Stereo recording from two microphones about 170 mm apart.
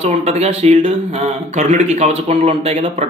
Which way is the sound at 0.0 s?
40° right (ahead or behind).